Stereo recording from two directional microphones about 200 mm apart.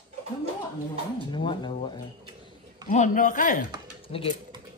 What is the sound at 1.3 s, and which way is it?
Speech, 25° left (ahead or behind).